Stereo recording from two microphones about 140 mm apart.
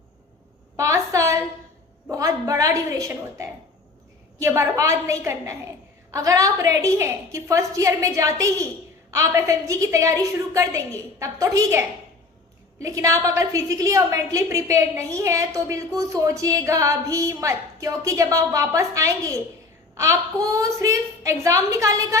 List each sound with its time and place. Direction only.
0.8 s a sound: 20° right (ahead or behind)
3.1 s a woman's voice: 20° right (ahead or behind)
12.9 s a woman's voice: 20° right (ahead or behind)